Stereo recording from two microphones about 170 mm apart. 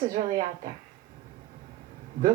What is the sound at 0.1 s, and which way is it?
Speech, 50° right (ahead or behind).